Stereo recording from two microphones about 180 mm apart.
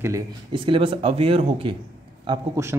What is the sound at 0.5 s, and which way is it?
Speech, 30° right (ahead or behind).